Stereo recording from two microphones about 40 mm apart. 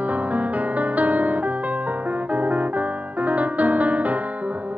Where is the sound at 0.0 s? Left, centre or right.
Right.